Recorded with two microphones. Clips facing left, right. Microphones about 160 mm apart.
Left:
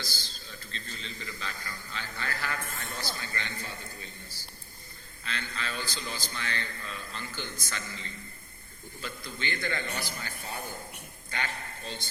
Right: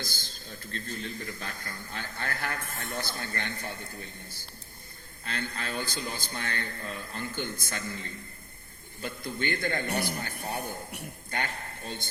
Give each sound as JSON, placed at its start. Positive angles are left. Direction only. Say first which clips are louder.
{"t": 0.0, "sound": "a man's voice", "louder": "right 2 dB", "side_deg": -50}